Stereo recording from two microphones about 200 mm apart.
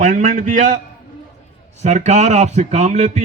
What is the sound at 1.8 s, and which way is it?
A man's voice, 35° right (ahead or behind).